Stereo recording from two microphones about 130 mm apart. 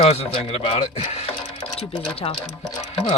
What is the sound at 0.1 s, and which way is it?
Speech, 50° left (ahead or behind).